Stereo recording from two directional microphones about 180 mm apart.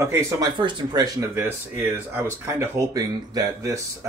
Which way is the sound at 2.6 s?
20° right (ahead or behind).